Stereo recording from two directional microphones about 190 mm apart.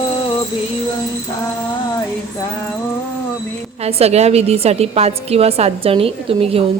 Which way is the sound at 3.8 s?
35° right (ahead or behind).